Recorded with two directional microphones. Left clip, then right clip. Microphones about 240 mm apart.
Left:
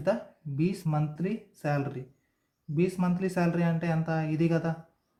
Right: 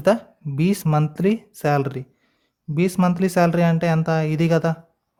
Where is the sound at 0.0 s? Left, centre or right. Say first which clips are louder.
Right 10 dB; right.